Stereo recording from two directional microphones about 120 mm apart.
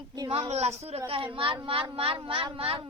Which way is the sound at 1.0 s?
45° right (ahead or behind).